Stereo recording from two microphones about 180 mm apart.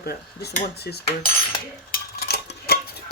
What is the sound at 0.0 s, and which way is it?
Speech, 60° left (ahead or behind).